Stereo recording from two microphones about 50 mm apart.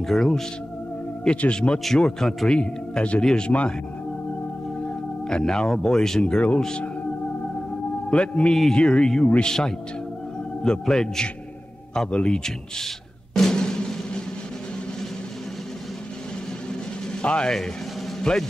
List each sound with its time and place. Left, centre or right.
0.0 s speech: centre
1.2 s speech: left
4.8 s speech: centre
8.1 s speech: left
12.1 s speech: left
12.4 s music: centre
17.2 s speech: centre